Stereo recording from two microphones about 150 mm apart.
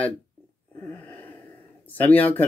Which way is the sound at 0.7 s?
15° left (ahead or behind).